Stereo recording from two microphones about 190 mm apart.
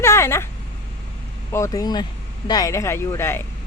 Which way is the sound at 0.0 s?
15° left (ahead or behind).